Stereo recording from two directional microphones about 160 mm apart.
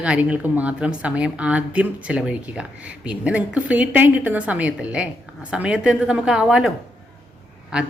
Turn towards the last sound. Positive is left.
turn(degrees=-5)  # may be behind; listen again after turning